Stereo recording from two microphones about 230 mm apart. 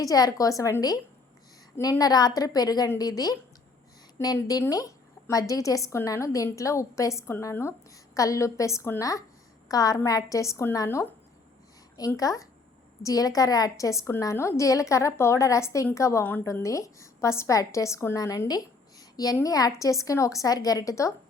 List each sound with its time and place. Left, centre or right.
0.0 s a woman's voice: centre